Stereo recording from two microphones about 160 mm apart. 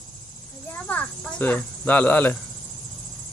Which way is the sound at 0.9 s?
10° left (ahead or behind).